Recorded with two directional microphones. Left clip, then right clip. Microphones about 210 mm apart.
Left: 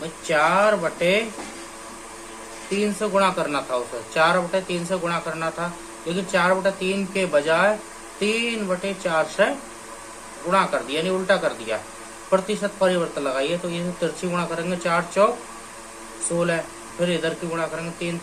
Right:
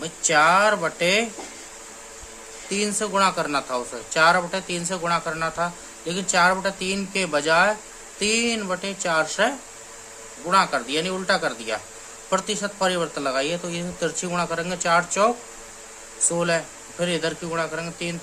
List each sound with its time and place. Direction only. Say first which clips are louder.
0.2 s speech: right 2 dB; 45° right (ahead or behind)
2.8 s speech: left 1 dB; 45° right (ahead or behind)
10.5 s speech: right 1 dB; 45° right (ahead or behind)
17.0 s speech: left 1 dB; 40° right (ahead or behind)